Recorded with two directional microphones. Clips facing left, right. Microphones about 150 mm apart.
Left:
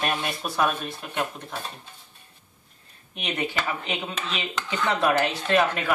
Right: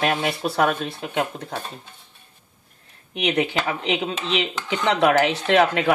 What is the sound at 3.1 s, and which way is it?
Speech, 80° right.